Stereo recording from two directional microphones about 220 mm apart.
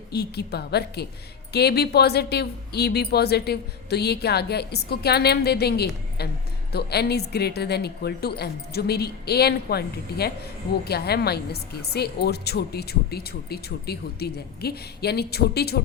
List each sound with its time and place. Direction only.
0.1 s a woman's voice: 50° left (ahead or behind)